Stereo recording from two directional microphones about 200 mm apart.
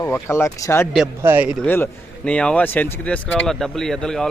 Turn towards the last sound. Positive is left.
turn(degrees=5)  # may be behind; listen again after turning